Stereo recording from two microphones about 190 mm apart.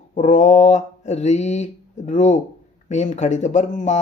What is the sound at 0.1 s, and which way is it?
Speech, 40° left (ahead or behind).